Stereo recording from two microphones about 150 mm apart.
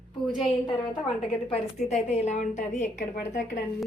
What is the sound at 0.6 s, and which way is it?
Speech, 30° left (ahead or behind).